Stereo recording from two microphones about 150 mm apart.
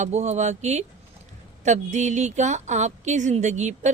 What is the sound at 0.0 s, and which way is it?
A woman's voice, 50° right (ahead or behind).